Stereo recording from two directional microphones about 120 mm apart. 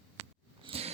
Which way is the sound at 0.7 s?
55° right (ahead or behind).